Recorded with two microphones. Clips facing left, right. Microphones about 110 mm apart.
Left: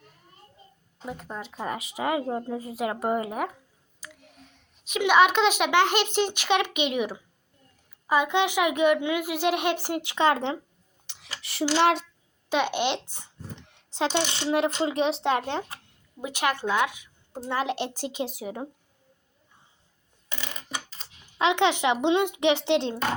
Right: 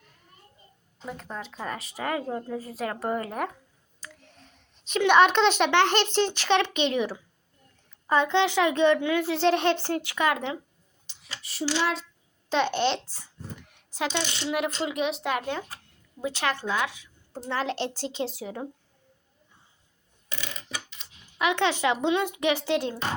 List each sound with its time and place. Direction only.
1.0 s a child's voice: 5° left (ahead or behind); by 10.6 s 30° left (ahead or behind)
11.0 s a sound: 70° left (ahead or behind)
11.8 s a child's voice: 65° left (ahead or behind)
12.5 s a child's voice: 15° left (ahead or behind); by 15.6 s 30° left (ahead or behind)
16.2 s a child's voice: 15° left (ahead or behind)
20.3 s coin: 15° left (ahead or behind)
20.9 s a sound: 35° left (ahead or behind)
21.4 s speech: 20° left (ahead or behind)